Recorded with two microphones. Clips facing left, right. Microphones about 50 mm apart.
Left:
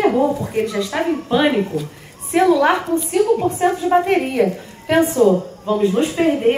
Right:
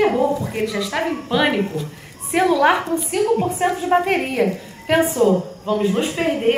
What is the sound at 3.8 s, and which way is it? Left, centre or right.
A woman's voice, right.